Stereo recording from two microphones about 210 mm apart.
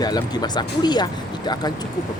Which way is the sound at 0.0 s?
20° left (ahead or behind).